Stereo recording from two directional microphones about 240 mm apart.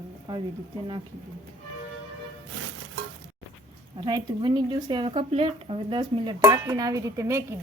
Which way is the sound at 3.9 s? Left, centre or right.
Centre.